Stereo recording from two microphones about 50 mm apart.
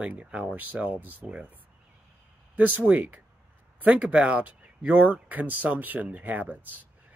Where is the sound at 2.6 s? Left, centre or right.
Right.